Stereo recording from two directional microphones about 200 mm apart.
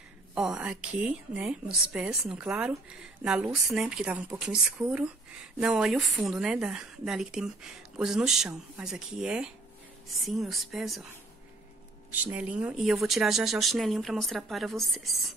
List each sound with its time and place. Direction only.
0.3 s a woman's voice: 5° right (ahead or behind)
12.1 s a woman's voice: 10° right (ahead or behind)